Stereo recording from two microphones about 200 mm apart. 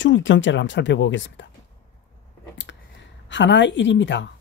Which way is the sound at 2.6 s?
65° left (ahead or behind).